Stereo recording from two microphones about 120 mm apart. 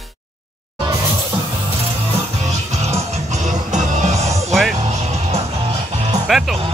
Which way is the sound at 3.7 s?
75° right (ahead or behind).